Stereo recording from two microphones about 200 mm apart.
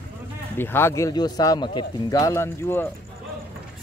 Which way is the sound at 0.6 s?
10° left (ahead or behind).